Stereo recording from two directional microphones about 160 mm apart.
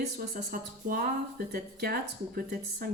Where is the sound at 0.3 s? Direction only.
60° right (ahead or behind).